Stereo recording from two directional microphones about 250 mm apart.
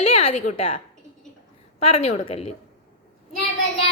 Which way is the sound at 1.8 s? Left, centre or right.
Left.